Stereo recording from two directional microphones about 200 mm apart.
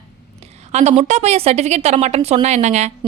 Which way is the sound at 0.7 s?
35° right (ahead or behind).